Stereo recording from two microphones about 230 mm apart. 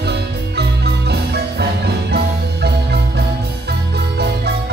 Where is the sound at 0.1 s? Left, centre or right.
Right.